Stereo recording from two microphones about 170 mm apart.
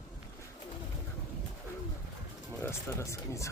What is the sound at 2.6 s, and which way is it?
Speech, 15° left (ahead or behind).